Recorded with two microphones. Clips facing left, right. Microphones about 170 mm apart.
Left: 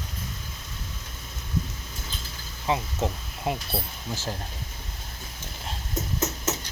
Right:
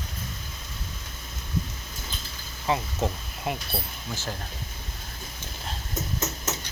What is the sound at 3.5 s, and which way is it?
Speech, 30° left (ahead or behind).